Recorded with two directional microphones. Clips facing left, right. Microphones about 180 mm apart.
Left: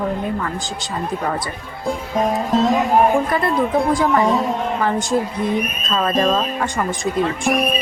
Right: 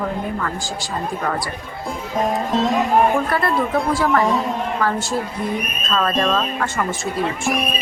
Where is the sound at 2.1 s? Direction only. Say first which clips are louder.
Left 1 dB; centre (ahead or behind).